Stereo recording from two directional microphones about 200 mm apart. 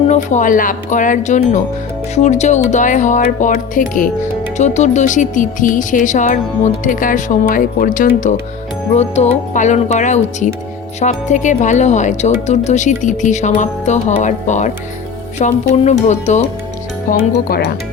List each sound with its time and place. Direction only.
0.1 s speech: 40° left (ahead or behind)
17.1 s speech: 50° left (ahead or behind)